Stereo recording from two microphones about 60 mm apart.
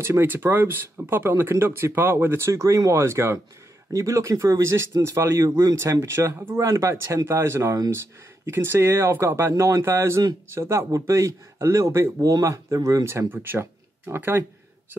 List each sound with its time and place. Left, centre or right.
0.0 s speech: right
3.9 s speech: right
6.7 s speech: right
7.2 s speech: right
10.9 s speech: right
12.2 s speech: right
13.3 s speech: right